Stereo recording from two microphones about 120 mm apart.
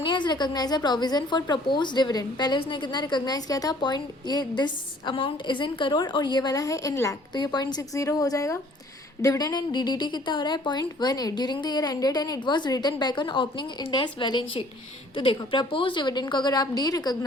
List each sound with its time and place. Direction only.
0.0 s a woman's voice: 40° left (ahead or behind)